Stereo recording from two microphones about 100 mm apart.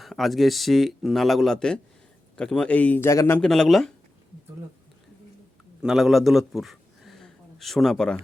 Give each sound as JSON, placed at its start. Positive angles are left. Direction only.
{"t": 0.0, "sound": "speech", "side_deg": 0}
{"t": 3.1, "sound": "a man's voice", "side_deg": 30}
{"t": 3.3, "sound": "speech", "side_deg": 5}
{"t": 5.8, "sound": "a man's voice", "side_deg": -5}